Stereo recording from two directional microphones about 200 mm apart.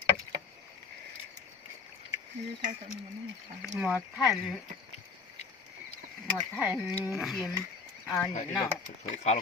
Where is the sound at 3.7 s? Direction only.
5° right (ahead or behind).